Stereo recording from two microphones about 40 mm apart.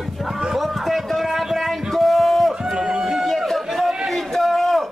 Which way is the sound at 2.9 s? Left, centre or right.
Centre.